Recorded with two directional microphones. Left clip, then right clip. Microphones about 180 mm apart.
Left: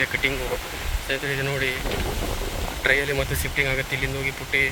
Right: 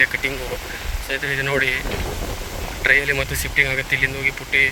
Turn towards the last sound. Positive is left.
turn(degrees=10)  # may be behind; listen again after turning